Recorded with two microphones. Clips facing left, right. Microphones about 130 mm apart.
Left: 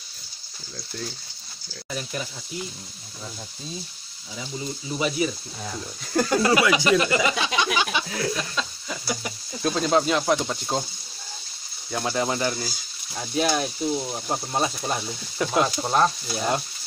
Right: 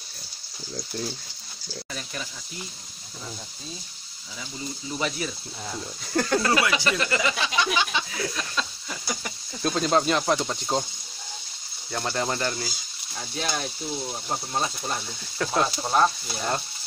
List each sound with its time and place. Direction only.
1.9 s speech: 20° left (ahead or behind)
4.9 s speech: 10° left (ahead or behind)
8.5 s speech: centre (ahead or behind)
11.9 s speech: 5° left (ahead or behind)